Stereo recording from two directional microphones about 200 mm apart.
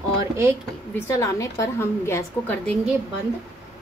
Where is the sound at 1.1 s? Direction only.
15° left (ahead or behind).